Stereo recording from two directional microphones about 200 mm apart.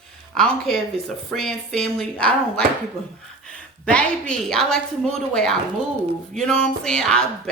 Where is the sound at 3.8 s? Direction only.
5° left (ahead or behind).